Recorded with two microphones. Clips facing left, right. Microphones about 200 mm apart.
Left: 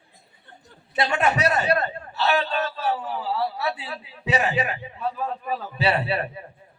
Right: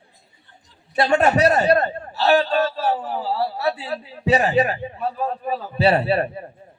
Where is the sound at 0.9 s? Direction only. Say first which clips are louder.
Right 6 dB; 45° right (ahead or behind).